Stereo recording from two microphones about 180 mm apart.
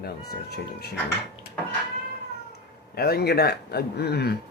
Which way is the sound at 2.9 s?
60° left (ahead or behind).